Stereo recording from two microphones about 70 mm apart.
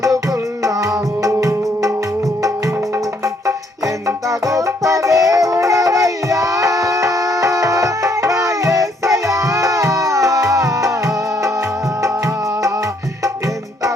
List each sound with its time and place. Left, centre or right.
0.6 s music: right
4.0 s music: right